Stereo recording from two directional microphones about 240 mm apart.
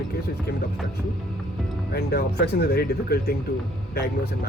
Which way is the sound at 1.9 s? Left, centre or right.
Left.